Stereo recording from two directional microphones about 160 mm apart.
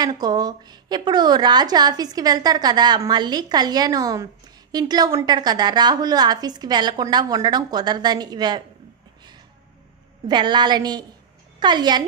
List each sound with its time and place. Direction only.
0.0 s a woman's voice: 25° right (ahead or behind)
10.2 s a woman's voice: 30° right (ahead or behind)